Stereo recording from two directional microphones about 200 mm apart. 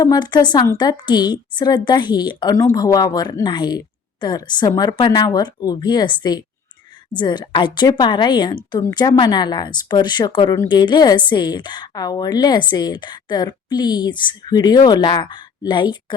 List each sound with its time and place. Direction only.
0.0 s a woman's voice: 20° left (ahead or behind)